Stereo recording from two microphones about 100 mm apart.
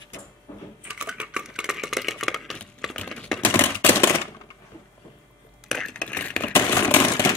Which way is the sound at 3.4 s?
20° left (ahead or behind).